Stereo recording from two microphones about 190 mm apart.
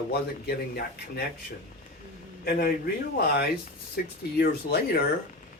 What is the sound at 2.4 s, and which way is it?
A man's voice, 50° left (ahead or behind).